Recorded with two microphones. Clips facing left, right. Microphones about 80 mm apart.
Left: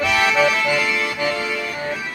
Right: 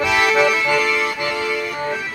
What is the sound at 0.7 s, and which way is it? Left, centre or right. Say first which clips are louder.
Accordion: right 3 dB; centre.